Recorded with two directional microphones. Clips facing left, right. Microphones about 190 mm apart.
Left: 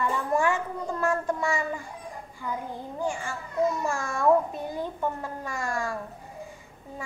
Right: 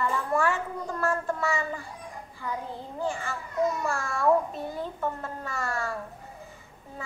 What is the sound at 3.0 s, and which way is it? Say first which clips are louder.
A child's voice: even; 15° left (ahead or behind).